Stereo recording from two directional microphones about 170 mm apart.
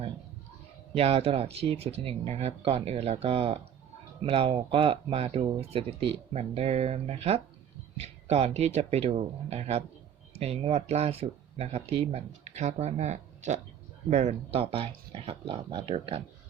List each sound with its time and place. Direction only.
0.9 s speech: 35° right (ahead or behind)